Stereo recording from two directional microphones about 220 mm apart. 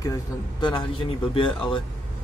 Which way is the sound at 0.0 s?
20° left (ahead or behind).